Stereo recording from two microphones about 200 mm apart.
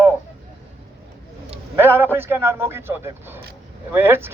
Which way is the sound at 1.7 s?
10° right (ahead or behind).